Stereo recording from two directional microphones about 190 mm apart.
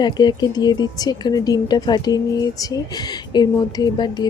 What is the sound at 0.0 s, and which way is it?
Speech, 20° left (ahead or behind).